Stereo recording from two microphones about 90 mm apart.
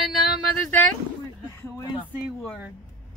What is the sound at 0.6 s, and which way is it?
Speech, 20° left (ahead or behind).